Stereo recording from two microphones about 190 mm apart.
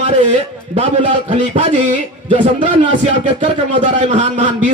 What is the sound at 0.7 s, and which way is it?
A man's voice, 35° right (ahead or behind).